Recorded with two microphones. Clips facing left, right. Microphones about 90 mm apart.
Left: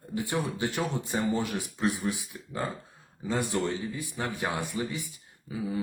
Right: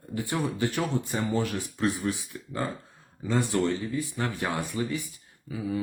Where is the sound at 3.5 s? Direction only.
15° left (ahead or behind).